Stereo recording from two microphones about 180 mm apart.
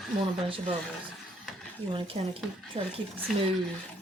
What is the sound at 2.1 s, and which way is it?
Speech, 35° right (ahead or behind).